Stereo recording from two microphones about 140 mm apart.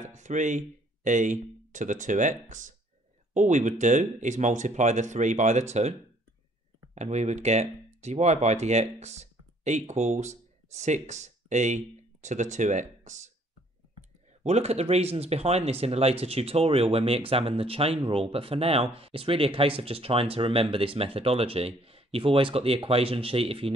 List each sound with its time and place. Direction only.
0.0 s speech: 60° right (ahead or behind)
7.0 s speech: 55° right (ahead or behind)
14.4 s speech: 50° right (ahead or behind)